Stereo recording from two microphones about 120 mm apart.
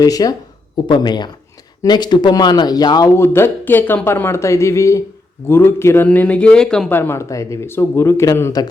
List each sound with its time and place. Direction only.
0.0 s speech: 30° left (ahead or behind); by 6.9 s 5° left (ahead or behind)
6.9 s speech: 20° left (ahead or behind)